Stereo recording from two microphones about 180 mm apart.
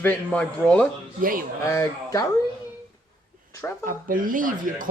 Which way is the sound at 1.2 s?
50° right (ahead or behind).